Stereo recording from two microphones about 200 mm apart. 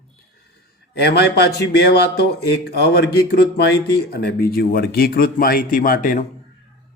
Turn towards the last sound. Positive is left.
turn(degrees=40)  # may be behind; listen again after turning